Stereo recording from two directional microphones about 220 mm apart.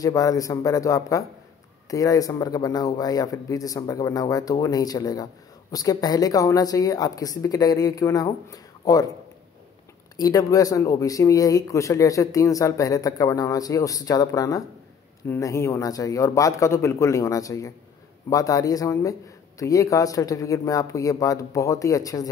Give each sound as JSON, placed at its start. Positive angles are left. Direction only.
{"t": 0.0, "sound": "speech", "side_deg": 15}
{"t": 10.1, "sound": "speech", "side_deg": 15}